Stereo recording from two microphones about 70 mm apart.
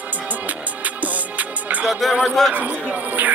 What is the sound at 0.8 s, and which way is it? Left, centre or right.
Music, right.